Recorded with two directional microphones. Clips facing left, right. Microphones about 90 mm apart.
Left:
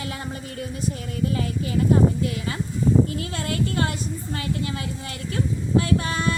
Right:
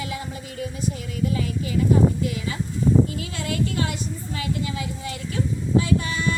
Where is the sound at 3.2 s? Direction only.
45° left (ahead or behind).